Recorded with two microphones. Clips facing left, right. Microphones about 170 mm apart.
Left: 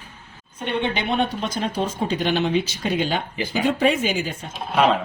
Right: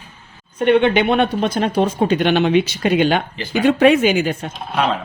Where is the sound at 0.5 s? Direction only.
70° right (ahead or behind).